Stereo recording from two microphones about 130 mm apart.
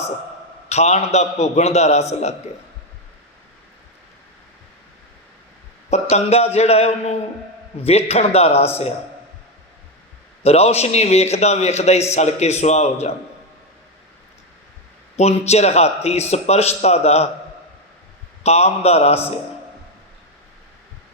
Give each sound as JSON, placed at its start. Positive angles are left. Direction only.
{"t": 0.7, "sound": "a man's voice", "side_deg": 60}
{"t": 5.9, "sound": "a man's voice", "side_deg": 55}
{"t": 10.4, "sound": "a man's voice", "side_deg": 55}
{"t": 15.1, "sound": "a man's voice", "side_deg": 55}
{"t": 18.4, "sound": "a man's voice", "side_deg": 55}